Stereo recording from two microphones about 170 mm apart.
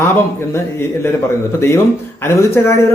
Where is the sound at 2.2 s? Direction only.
15° left (ahead or behind).